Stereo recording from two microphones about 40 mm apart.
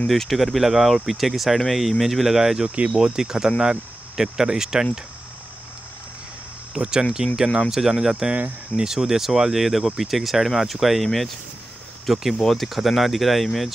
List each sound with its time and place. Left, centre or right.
0.1 s speech: centre
6.8 s speech: centre
12.4 s speech: centre
12.6 s speech: centre